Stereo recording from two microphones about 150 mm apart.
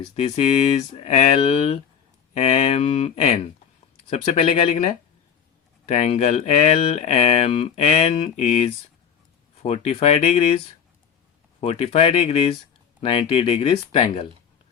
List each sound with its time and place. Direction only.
0.2 s speech: 45° left (ahead or behind)
11.6 s speech: 40° left (ahead or behind)